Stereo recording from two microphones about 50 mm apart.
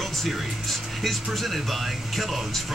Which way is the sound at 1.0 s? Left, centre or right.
Centre.